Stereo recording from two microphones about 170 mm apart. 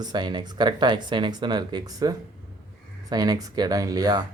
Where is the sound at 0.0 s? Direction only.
25° right (ahead or behind).